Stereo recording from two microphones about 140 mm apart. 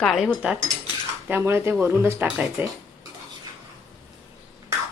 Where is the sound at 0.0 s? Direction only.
Centre (ahead or behind).